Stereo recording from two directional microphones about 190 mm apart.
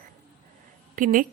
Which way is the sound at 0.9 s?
45° right (ahead or behind).